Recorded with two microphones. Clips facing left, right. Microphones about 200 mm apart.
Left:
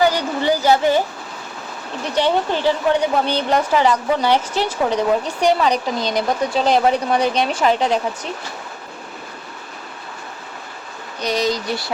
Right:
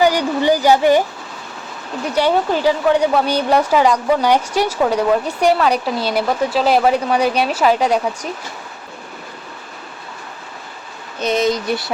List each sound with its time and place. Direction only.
0.0 s speech: 15° right (ahead or behind)
2.1 s speech: 10° right (ahead or behind)
11.2 s speech: 20° right (ahead or behind)